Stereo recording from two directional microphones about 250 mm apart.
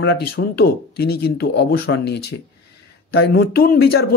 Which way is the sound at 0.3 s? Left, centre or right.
Left.